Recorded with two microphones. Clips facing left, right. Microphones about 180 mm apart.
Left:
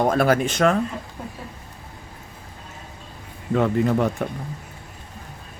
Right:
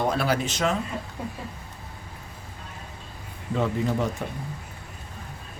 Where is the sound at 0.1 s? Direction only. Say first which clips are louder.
Left 6 dB; 50° left (ahead or behind).